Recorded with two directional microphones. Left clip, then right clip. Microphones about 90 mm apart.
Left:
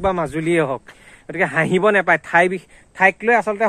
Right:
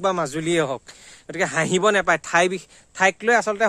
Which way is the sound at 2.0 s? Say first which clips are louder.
Left 4 dB; 35° right (ahead or behind).